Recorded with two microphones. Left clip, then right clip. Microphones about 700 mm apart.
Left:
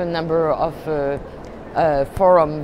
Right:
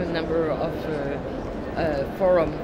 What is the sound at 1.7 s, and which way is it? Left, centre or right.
Speech, left.